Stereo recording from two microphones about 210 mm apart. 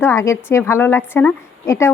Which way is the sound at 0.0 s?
15° left (ahead or behind).